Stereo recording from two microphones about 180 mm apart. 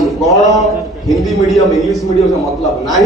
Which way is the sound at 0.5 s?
Centre (ahead or behind).